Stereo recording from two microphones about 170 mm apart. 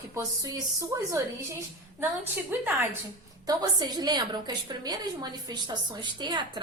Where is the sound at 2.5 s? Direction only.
10° right (ahead or behind).